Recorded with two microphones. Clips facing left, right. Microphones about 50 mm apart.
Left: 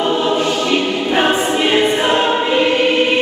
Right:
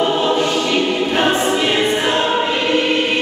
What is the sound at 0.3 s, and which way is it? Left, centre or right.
Choir, centre.